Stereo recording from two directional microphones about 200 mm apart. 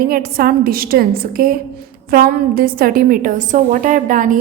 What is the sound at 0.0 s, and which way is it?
A woman's voice, 45° right (ahead or behind).